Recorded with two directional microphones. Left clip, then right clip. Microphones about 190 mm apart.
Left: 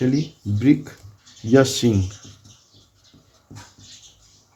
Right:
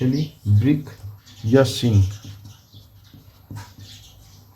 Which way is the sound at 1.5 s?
30° left (ahead or behind).